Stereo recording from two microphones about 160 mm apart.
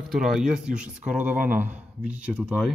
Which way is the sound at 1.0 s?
55° right (ahead or behind).